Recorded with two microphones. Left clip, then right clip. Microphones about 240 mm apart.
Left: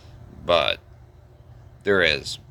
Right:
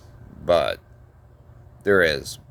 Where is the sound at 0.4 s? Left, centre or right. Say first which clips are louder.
Even; right.